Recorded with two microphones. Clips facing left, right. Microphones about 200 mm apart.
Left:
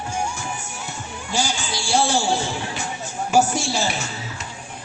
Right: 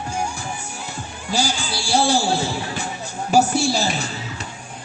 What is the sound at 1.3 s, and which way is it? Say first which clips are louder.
Music: right 2 dB; 35° right (ahead or behind).